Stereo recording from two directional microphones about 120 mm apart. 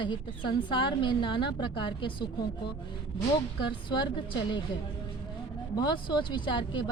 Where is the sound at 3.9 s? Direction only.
40° left (ahead or behind).